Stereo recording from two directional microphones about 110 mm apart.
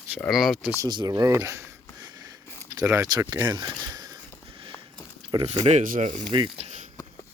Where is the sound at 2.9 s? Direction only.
30° right (ahead or behind).